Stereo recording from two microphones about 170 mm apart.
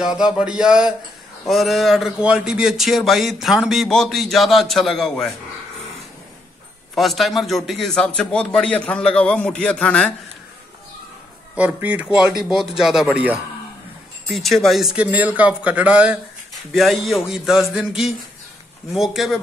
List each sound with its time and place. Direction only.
0.0 s speech: 5° right (ahead or behind)
7.0 s speech: centre (ahead or behind)
11.5 s a man's voice: 10° right (ahead or behind)